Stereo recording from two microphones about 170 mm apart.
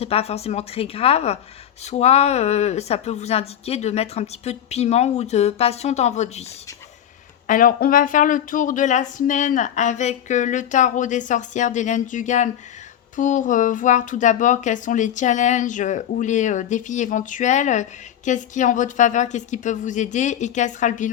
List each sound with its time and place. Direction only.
0.0 s speech: 35° left (ahead or behind)
7.4 s speech: 55° left (ahead or behind)